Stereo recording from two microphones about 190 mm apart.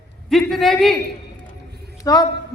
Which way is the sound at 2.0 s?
20° left (ahead or behind).